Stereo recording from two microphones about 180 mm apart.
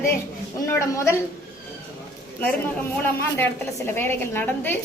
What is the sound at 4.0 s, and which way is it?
Speech, 10° left (ahead or behind).